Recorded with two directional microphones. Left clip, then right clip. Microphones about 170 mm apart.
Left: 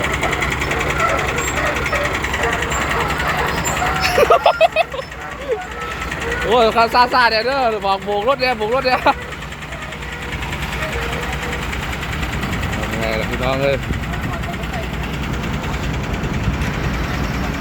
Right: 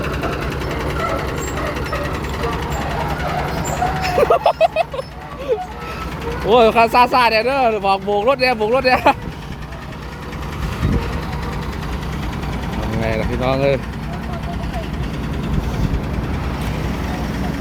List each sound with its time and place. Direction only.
4.0 s a sound: 5° right (ahead or behind)
6.5 s speech: 30° right (ahead or behind)
13.1 s sewing machine: 25° right (ahead or behind)